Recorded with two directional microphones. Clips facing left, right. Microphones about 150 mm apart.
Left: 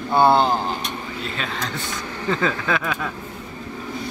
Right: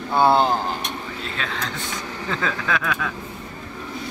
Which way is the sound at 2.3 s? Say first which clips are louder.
Left 3 dB; 5° left (ahead or behind).